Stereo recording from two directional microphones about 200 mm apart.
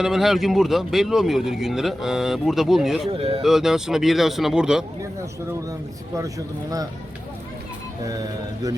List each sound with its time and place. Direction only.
0.0 s a man's voice: centre (ahead or behind)
3.1 s speech: 30° right (ahead or behind)
3.4 s a man's voice: centre (ahead or behind)
6.1 s speech: 15° right (ahead or behind)